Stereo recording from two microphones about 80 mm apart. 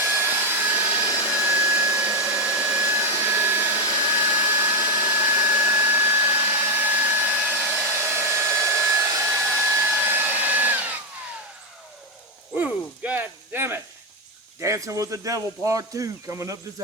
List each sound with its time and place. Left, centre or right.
0.0 s hair dryer: right
12.5 s hoot: centre
14.6 s speech: right